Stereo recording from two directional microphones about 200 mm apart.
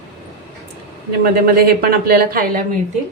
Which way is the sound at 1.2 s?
50° right (ahead or behind).